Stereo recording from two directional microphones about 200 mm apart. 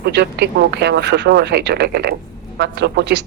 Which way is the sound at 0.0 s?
55° right (ahead or behind).